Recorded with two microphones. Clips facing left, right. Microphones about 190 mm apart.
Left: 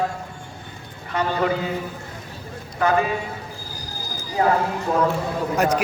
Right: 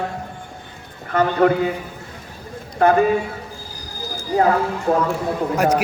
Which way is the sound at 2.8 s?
55° right (ahead or behind).